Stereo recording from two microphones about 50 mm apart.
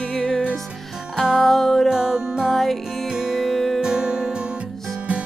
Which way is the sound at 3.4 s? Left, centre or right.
Centre.